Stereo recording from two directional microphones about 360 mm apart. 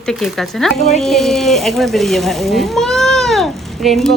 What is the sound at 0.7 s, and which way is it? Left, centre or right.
Speech, centre.